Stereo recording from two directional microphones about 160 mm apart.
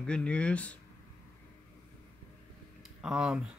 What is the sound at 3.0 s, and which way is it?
Speech, 5° right (ahead or behind).